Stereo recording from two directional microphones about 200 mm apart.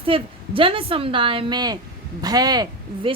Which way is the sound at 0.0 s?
25° right (ahead or behind).